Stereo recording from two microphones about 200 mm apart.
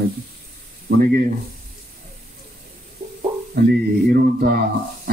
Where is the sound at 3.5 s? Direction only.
50° right (ahead or behind).